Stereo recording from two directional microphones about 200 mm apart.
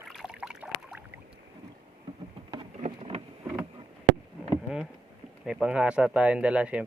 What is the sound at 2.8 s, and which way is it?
Vehicle, 30° right (ahead or behind).